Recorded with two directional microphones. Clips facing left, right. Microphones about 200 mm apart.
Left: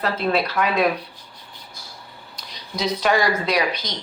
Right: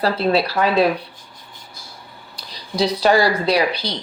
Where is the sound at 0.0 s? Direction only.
35° right (ahead or behind).